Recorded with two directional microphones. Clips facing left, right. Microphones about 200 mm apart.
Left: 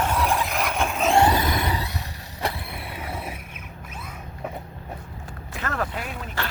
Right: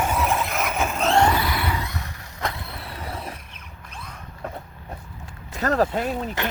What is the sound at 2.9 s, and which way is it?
Vehicle, 5° left (ahead or behind).